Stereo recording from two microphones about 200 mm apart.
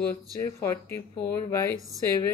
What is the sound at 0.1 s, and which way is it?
Speech, 15° left (ahead or behind).